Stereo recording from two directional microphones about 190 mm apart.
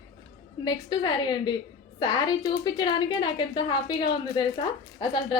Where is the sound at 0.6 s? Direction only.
20° left (ahead or behind).